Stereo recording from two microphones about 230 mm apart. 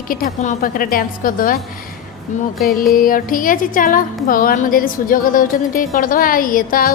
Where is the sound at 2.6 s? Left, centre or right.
Centre.